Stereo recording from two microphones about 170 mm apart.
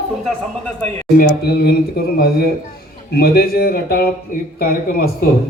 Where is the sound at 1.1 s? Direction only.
60° left (ahead or behind).